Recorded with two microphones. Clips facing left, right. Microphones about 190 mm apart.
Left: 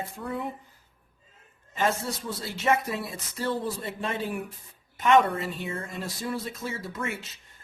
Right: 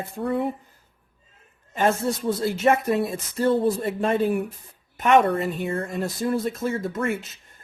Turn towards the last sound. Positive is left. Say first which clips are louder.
# right 8 dB
turn(degrees=-50)  # may be behind; listen again after turning